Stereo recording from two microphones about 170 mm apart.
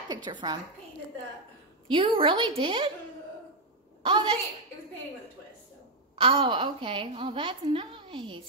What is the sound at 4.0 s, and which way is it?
Speech, 25° right (ahead or behind).